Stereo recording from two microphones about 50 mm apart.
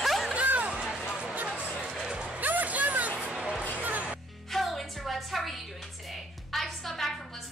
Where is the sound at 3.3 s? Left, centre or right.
Centre.